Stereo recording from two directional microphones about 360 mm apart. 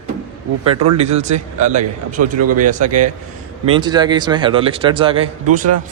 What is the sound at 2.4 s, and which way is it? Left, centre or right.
Speech, right.